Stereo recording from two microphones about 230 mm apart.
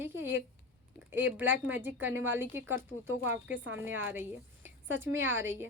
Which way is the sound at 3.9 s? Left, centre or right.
Right.